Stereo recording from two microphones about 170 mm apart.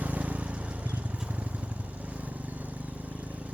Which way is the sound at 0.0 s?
10° right (ahead or behind).